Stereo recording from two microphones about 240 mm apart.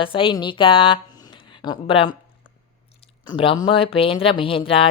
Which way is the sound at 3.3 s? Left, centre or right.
Centre.